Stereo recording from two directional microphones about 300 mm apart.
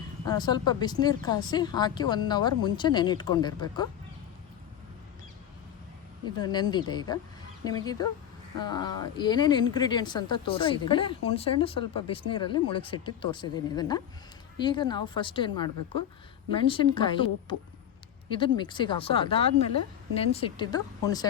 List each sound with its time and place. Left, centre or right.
0.3 s speech: centre
6.2 s speech: centre